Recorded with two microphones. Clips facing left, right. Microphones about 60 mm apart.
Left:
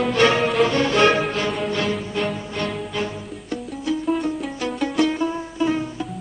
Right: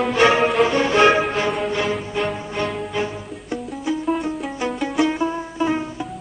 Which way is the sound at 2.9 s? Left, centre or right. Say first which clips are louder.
Right 2 dB; centre.